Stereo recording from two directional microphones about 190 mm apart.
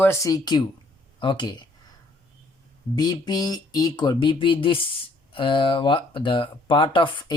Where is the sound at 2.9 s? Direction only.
20° left (ahead or behind).